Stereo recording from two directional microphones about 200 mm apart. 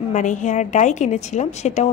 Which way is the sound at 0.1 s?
40° left (ahead or behind).